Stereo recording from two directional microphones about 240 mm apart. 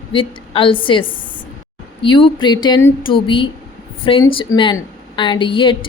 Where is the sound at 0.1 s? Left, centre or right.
Left.